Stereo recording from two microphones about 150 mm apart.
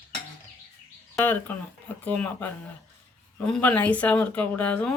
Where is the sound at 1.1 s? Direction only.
15° left (ahead or behind).